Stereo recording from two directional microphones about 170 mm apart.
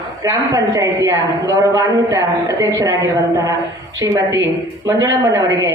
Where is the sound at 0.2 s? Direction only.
20° right (ahead or behind).